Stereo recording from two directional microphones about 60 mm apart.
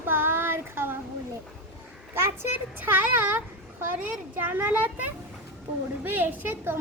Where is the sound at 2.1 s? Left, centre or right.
Right.